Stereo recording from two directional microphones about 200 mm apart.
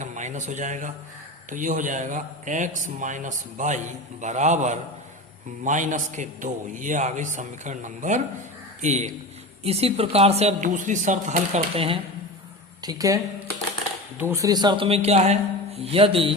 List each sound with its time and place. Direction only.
0.0 s a man's voice: 35° right (ahead or behind); by 13.1 s 20° right (ahead or behind)
14.2 s a man's voice: 15° right (ahead or behind)